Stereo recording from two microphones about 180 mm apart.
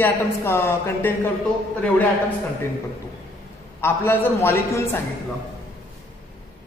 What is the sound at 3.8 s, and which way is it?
A woman's voice, 10° left (ahead or behind).